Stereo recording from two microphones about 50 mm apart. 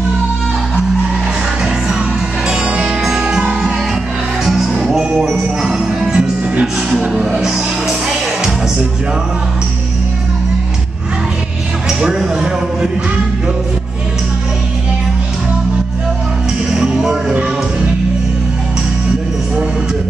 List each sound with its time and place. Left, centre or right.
2.5 s music: centre
4.9 s jingle bell: centre
5.9 s music: centre
6.6 s speech: centre
8.1 s music: centre
16.9 s music: centre